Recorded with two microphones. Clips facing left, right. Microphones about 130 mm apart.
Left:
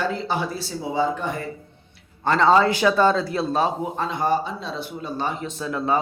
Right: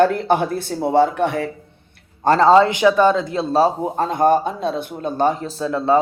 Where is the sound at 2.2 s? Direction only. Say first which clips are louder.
Right 5 dB; 40° right (ahead or behind).